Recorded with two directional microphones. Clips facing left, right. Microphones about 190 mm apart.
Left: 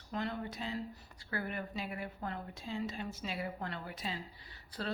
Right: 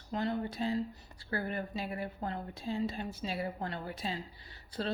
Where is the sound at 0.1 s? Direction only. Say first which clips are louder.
Right 4 dB; 30° right (ahead or behind).